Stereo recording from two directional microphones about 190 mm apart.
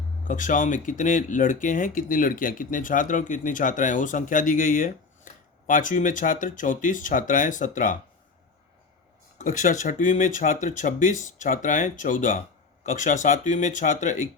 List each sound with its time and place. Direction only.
0.3 s speech: 45° left (ahead or behind)
9.4 s speech: 45° left (ahead or behind)